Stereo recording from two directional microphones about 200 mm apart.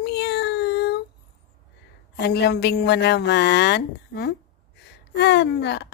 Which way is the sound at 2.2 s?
55° left (ahead or behind).